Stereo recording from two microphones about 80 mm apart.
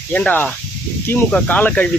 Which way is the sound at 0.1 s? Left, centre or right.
Left.